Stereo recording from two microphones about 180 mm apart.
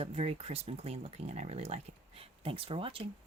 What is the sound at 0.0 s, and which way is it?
Speech, 35° right (ahead or behind).